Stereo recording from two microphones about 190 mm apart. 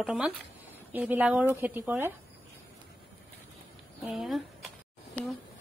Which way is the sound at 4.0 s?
Centre (ahead or behind).